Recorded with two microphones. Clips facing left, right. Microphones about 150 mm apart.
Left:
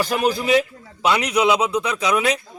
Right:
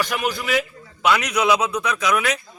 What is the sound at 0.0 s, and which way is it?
A man's voice, 35° left (ahead or behind).